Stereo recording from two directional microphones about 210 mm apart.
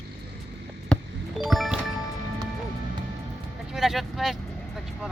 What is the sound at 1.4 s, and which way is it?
Speech, centre (ahead or behind).